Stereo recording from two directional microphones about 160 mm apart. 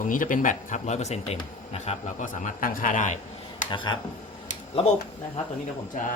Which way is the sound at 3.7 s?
30° left (ahead or behind).